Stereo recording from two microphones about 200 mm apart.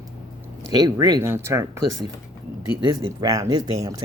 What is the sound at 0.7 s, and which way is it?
Speech, 20° right (ahead or behind).